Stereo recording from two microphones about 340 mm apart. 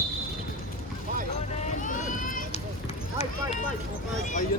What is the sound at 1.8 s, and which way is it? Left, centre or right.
Vehicle, left.